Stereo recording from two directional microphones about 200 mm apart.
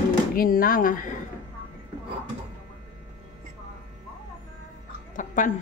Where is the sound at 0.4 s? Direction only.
45° left (ahead or behind).